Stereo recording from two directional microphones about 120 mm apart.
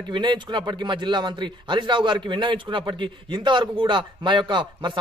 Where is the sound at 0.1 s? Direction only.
40° right (ahead or behind).